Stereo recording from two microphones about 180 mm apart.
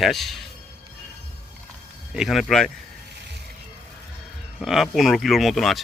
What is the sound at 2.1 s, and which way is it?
Speech, centre (ahead or behind).